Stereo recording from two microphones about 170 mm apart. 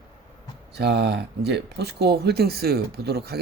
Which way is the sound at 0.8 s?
80° right.